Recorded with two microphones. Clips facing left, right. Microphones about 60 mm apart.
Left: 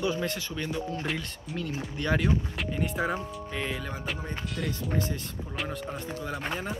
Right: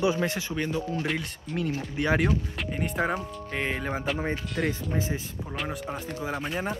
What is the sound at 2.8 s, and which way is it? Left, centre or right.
Speech, centre.